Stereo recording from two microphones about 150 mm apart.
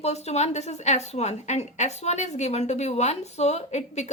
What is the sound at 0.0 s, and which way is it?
A woman's voice, 45° left (ahead or behind).